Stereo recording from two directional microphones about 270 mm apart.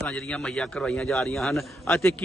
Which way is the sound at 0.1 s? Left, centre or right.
Centre.